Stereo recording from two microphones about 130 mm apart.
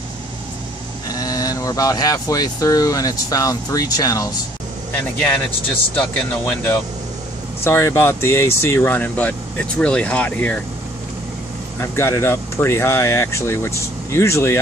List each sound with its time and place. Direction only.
1.1 s speech: 30° left (ahead or behind)
5.9 s speech: 15° left (ahead or behind)
11.8 s speech: 20° left (ahead or behind)